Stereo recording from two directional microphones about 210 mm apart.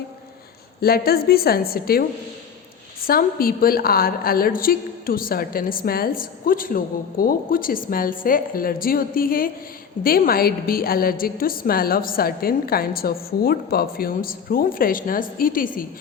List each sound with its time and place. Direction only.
0.8 s a woman's voice: 45° left (ahead or behind)